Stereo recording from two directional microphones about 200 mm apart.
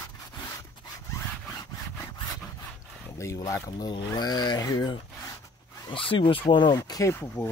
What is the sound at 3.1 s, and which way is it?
Speech, 15° left (ahead or behind).